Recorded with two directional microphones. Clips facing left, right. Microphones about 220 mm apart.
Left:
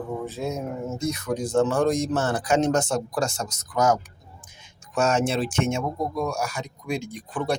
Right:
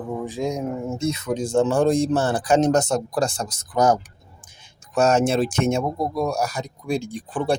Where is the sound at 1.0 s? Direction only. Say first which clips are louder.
Right 2 dB; 25° right (ahead or behind).